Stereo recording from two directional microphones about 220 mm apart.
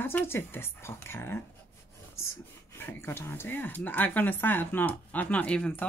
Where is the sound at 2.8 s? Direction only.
10° left (ahead or behind).